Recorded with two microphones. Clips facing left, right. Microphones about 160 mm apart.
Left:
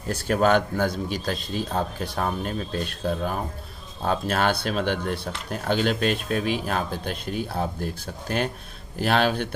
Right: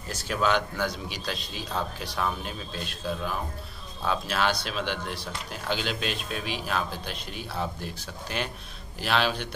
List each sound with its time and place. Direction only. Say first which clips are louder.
0.1 s speech: left 6 dB; 50° left (ahead or behind)